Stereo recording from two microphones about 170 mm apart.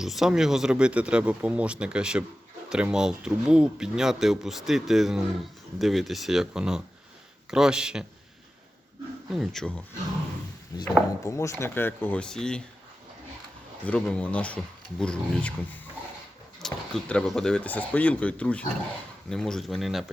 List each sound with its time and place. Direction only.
0.0 s speech: centre (ahead or behind)
9.3 s speech: centre (ahead or behind)
10.7 s speech: 20° left (ahead or behind); by 12.6 s 5° left (ahead or behind)
13.8 s speech: 5° left (ahead or behind)